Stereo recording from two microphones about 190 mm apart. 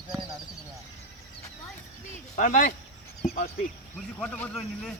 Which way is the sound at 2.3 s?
45° left (ahead or behind).